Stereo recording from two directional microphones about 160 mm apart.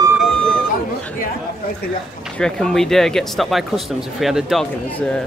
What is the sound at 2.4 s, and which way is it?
Speech, 5° left (ahead or behind).